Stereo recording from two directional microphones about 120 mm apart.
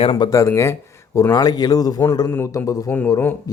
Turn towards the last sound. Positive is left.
turn(degrees=15)  # may be behind; listen again after turning